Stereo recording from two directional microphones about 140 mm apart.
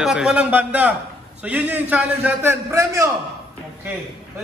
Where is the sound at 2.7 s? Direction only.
20° right (ahead or behind).